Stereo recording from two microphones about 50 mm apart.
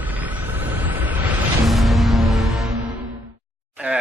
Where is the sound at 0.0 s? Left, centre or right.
Right.